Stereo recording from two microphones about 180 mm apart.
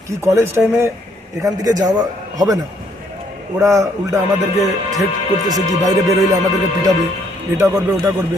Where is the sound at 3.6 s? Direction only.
15° right (ahead or behind).